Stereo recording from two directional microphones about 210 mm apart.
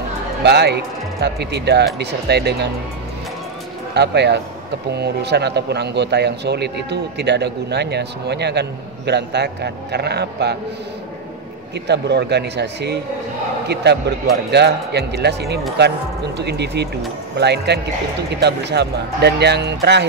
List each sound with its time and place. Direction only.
0.4 s speech: 55° right (ahead or behind)
3.9 s speech: 55° right (ahead or behind)
11.9 s speech: 55° right (ahead or behind)